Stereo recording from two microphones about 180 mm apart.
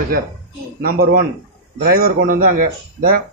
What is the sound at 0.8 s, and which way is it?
A man's voice, 55° right (ahead or behind).